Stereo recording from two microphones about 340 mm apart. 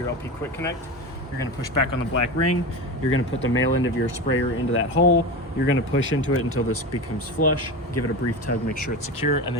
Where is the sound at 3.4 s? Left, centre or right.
Left.